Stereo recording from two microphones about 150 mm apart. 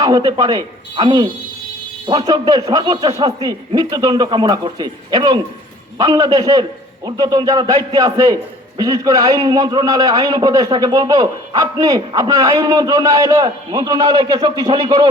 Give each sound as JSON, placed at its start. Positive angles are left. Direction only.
{"t": 0.0, "sound": "a man's voice", "side_deg": -25}